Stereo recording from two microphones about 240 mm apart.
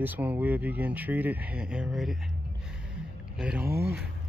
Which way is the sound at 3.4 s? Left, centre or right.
Centre.